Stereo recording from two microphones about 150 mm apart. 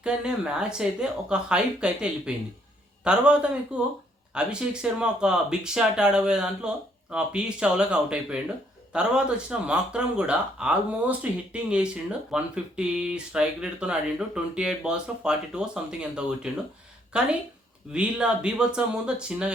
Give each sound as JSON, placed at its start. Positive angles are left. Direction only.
{"t": 0.0, "sound": "speech", "side_deg": -5}